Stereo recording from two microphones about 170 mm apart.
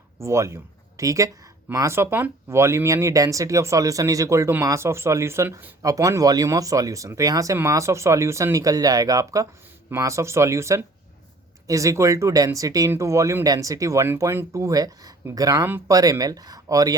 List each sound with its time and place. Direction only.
0.2 s speech: 15° right (ahead or behind)